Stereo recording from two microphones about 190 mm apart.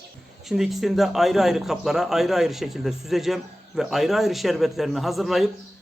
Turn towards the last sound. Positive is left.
turn(degrees=0)  # may be behind; listen again after turning